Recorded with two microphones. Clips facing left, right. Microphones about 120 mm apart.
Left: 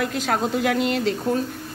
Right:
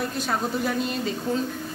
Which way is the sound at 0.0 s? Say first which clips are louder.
Left 4 dB; 90° left.